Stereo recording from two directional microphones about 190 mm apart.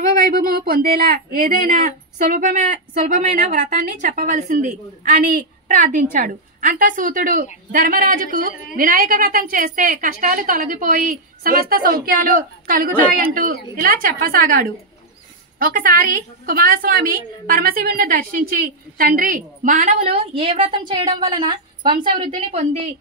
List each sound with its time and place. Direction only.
0.2 s a woman's voice: 50° right (ahead or behind); by 22.8 s 35° right (ahead or behind)